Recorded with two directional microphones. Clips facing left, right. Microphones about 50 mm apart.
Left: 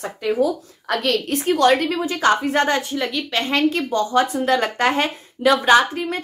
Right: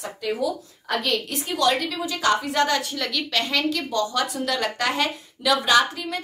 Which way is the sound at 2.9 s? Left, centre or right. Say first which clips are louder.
Left 3 dB; left.